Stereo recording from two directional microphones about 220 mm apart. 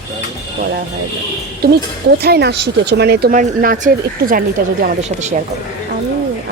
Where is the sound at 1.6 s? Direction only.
45° right (ahead or behind).